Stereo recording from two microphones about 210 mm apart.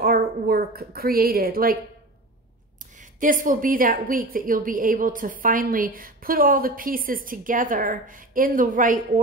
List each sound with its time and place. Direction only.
0.0 s speech: 45° right (ahead or behind)
3.2 s a woman's voice: 40° right (ahead or behind)